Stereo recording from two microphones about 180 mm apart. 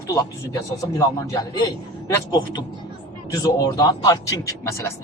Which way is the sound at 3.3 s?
20° left (ahead or behind).